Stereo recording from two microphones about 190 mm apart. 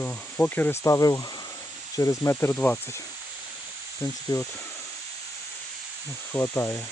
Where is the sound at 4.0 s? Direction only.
20° left (ahead or behind).